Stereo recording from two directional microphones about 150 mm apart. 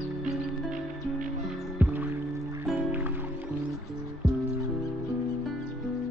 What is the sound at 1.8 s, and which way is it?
Music, 15° right (ahead or behind).